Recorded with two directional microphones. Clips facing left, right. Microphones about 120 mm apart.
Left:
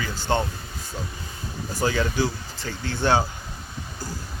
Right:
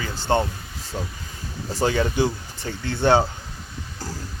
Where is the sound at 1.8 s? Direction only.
25° right (ahead or behind).